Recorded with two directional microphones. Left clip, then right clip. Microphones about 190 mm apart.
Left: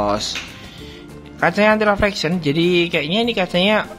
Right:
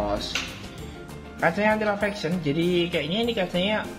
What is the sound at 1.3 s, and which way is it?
Speech, 35° left (ahead or behind).